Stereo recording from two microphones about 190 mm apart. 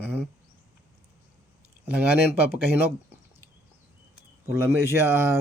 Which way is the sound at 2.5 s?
10° right (ahead or behind).